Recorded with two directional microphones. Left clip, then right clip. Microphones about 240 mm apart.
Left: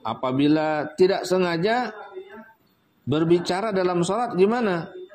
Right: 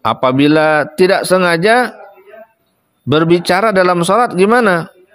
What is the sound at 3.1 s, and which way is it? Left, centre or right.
A man's voice, right.